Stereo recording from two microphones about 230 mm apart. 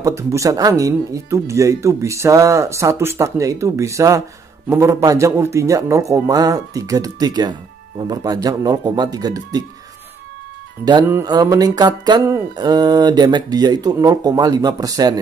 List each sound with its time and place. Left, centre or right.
0.0 s speech: centre
10.9 s speech: centre